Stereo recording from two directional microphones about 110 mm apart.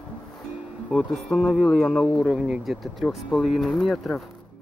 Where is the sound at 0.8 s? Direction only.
Centre (ahead or behind).